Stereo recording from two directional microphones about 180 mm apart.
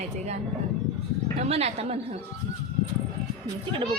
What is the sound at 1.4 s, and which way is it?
Speech, 35° right (ahead or behind).